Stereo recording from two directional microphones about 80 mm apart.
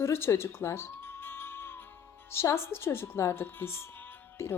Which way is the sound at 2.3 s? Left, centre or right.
Left.